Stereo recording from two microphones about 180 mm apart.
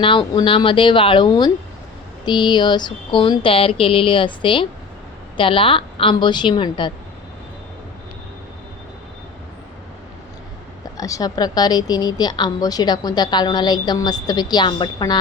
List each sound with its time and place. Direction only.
0.0 s a woman's voice: 30° left (ahead or behind)
10.9 s a woman's voice: 20° left (ahead or behind)